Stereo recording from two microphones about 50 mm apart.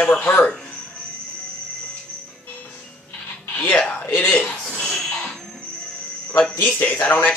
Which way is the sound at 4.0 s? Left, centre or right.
Left.